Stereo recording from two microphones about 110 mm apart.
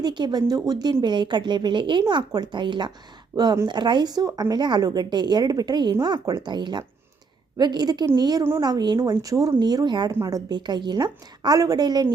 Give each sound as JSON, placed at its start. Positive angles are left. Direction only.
{"t": 0.0, "sound": "a woman's voice", "side_deg": -40}
{"t": 10.1, "sound": "a woman's voice", "side_deg": -30}